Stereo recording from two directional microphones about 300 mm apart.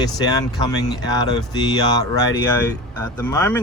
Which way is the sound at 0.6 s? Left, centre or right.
Centre.